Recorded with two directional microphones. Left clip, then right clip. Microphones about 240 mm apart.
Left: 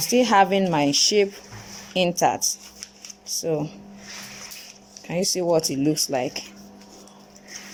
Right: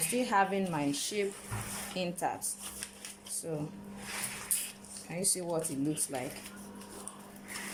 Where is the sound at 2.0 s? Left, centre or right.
Left.